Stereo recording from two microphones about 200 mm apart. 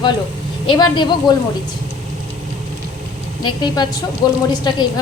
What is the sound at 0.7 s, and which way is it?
Speech, 25° left (ahead or behind).